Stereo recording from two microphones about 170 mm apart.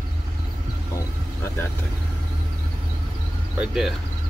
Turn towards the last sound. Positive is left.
turn(degrees=0)  # may be behind; listen again after turning